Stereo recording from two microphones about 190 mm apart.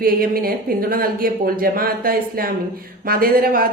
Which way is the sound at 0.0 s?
50° right (ahead or behind).